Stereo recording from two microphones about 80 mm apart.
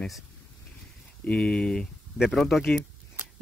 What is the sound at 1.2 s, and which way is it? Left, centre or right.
Speech, centre.